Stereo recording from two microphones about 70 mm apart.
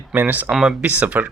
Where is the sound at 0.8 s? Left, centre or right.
Right.